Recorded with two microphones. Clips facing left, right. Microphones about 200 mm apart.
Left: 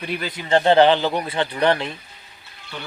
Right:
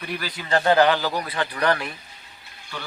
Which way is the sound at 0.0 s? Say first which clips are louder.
Left 3 dB; 25° left (ahead or behind).